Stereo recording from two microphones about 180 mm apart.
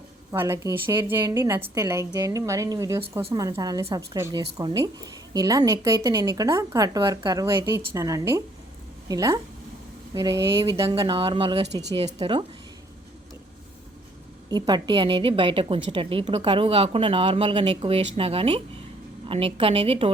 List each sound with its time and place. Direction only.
0.3 s a woman's voice: 15° right (ahead or behind)
11.7 s speech: 70° right (ahead or behind)
11.9 s a woman's voice: 30° right (ahead or behind)
14.5 s a woman's voice: 25° right (ahead or behind)